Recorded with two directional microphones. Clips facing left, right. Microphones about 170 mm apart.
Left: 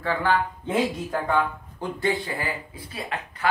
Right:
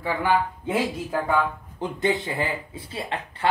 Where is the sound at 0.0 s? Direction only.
10° right (ahead or behind).